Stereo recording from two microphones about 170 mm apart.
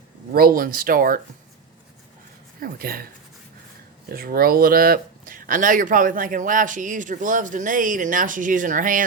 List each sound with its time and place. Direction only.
0.3 s speech: 60° right (ahead or behind)
2.6 s speech: 60° right (ahead or behind)
4.1 s speech: 60° right (ahead or behind)